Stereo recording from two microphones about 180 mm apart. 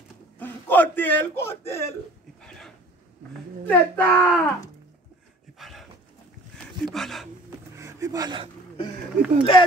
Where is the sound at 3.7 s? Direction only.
10° left (ahead or behind).